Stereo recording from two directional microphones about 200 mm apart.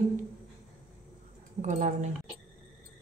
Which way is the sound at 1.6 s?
35° right (ahead or behind).